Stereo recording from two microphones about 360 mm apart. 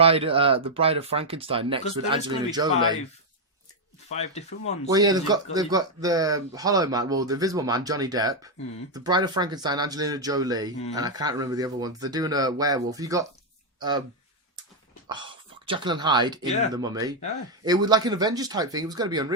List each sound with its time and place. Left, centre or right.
0.0 s speech: centre
4.1 s speech: centre
4.9 s speech: centre
15.1 s speech: centre